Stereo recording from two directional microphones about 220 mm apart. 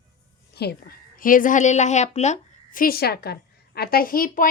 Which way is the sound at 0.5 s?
45° left (ahead or behind).